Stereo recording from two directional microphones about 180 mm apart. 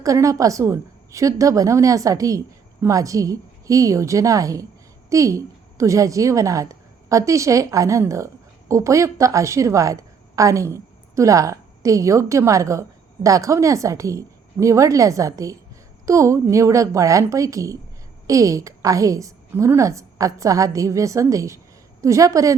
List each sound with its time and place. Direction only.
0.0 s a woman's voice: 20° right (ahead or behind)